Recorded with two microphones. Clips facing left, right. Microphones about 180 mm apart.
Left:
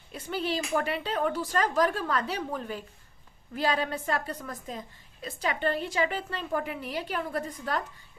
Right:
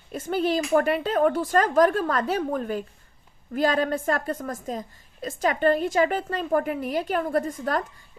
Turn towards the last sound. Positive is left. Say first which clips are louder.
# right 7 dB
turn(degrees=-45)  # may be behind; listen again after turning